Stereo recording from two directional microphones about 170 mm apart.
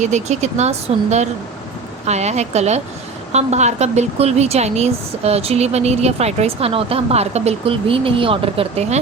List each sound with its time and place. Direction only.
0.0 s speech: 40° right (ahead or behind)